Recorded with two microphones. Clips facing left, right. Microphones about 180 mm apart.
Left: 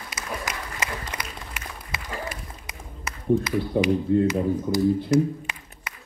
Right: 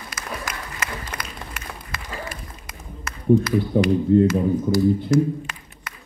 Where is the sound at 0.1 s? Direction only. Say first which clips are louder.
Even; 20° left (ahead or behind).